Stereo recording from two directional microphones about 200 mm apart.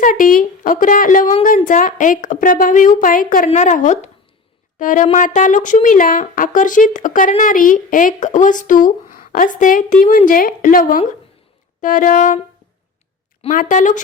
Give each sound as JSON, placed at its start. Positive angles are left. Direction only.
{"t": 0.0, "sound": "speech", "side_deg": 45}
{"t": 13.4, "sound": "speech", "side_deg": 40}